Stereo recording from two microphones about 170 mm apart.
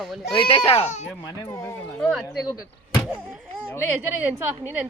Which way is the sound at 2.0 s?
5° left (ahead or behind).